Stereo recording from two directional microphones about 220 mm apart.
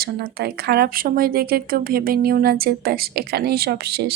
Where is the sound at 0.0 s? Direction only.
45° right (ahead or behind).